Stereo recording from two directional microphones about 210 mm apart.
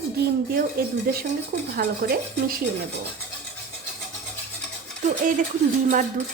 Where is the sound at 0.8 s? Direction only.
45° right (ahead or behind).